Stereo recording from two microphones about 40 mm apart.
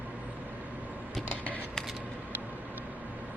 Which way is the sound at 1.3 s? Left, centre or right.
Right.